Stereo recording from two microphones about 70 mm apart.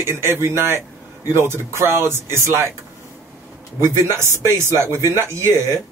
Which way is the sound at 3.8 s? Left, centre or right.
Right.